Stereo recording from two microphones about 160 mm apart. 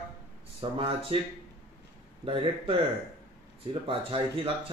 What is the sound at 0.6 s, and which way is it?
Speech, 35° right (ahead or behind).